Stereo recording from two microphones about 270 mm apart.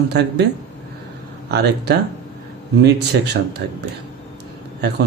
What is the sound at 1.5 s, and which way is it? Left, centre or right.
Speech, right.